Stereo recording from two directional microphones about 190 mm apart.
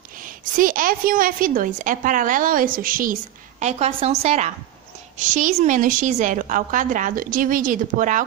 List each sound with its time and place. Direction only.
0.6 s a woman's voice: 45° right (ahead or behind)